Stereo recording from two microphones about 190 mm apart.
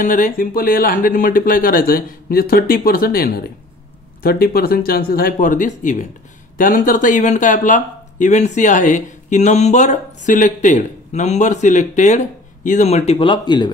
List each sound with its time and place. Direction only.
0.0 s speech: 40° left (ahead or behind); by 13.7 s 25° left (ahead or behind)